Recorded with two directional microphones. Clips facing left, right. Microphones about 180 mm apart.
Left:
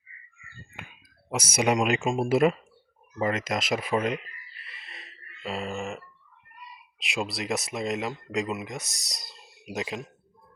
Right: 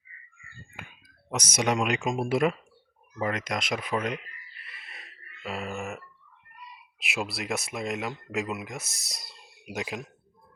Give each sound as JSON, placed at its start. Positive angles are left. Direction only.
{"t": 1.3, "sound": "speech", "side_deg": 10}
{"t": 5.4, "sound": "grunt", "side_deg": 0}
{"t": 7.0, "sound": "speech", "side_deg": 0}